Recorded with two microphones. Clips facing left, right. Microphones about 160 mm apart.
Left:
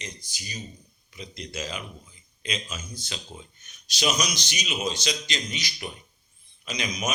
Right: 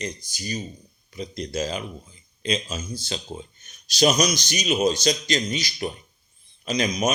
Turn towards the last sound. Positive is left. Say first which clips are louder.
# right 7 dB
turn(degrees=-35)  # may be behind; listen again after turning